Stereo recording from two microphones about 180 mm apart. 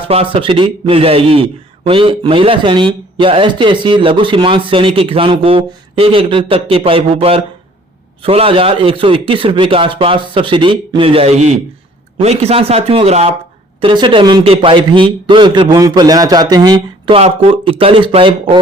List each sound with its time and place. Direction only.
0.1 s a man's voice: 30° right (ahead or behind)